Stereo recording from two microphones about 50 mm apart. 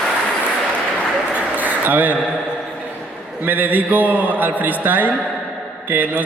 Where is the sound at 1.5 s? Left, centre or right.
Right.